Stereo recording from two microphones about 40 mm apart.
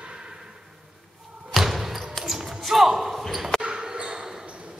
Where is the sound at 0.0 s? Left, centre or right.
Right.